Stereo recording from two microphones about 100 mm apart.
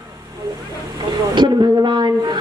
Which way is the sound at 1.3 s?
50° right (ahead or behind).